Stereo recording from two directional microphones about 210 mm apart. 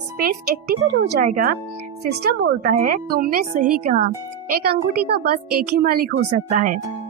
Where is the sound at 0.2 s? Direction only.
45° right (ahead or behind).